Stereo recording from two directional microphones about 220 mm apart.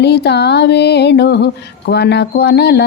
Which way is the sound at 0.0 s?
50° left (ahead or behind).